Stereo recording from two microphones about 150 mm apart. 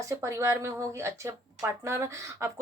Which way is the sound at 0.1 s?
20° right (ahead or behind).